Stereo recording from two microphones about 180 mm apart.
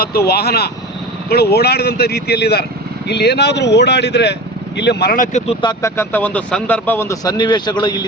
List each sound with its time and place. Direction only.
0.3 s speech: 60° left (ahead or behind)
5.8 s speech: 10° left (ahead or behind)